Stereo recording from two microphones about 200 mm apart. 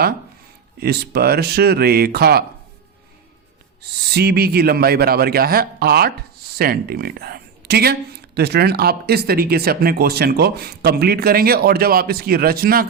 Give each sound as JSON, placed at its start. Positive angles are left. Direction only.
{"t": 0.8, "sound": "speech", "side_deg": -50}
{"t": 3.8, "sound": "speech", "side_deg": -55}